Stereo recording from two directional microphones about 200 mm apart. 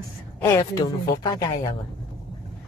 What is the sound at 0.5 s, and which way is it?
Speech, 15° left (ahead or behind).